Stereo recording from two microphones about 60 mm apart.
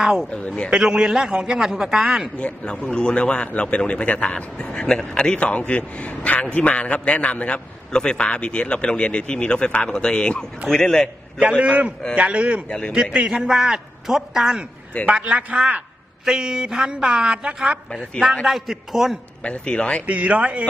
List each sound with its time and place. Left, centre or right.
0.0 s a man's voice: centre
0.3 s a man's voice: left
0.7 s a man's voice: centre
2.4 s a man's voice: centre
11.4 s a man's voice: centre
19.5 s a man's voice: centre
20.1 s a man's voice: right